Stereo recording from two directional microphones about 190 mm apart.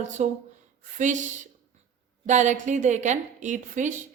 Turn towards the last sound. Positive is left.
turn(degrees=-40)  # may be behind; listen again after turning